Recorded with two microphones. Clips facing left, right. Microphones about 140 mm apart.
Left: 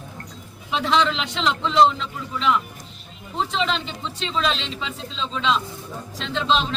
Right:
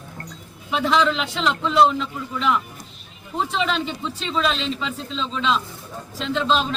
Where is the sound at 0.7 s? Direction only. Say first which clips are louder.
Right 1 dB; 5° right (ahead or behind).